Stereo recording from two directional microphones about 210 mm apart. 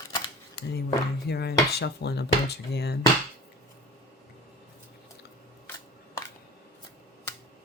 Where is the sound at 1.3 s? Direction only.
50° left (ahead or behind).